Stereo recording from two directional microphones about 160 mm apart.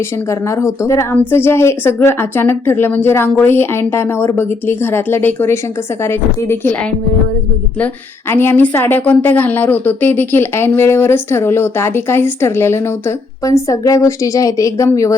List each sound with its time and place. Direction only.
0.3 s a woman's voice: 20° left (ahead or behind)
8.3 s a woman's voice: 15° left (ahead or behind)